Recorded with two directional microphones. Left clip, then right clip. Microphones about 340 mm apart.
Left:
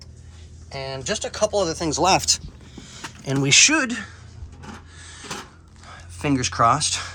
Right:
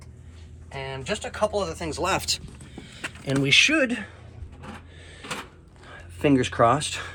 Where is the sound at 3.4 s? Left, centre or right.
Centre.